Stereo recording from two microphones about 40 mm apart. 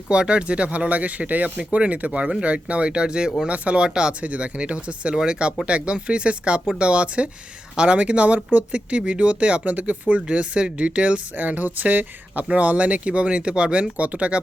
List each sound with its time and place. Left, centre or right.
0.1 s speech: right
3.5 s speech: right
3.8 s speech: right
4.2 s speech: right
11.3 s speech: right
13.9 s speech: right